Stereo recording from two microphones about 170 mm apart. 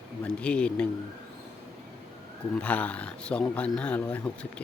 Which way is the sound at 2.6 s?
10° left (ahead or behind).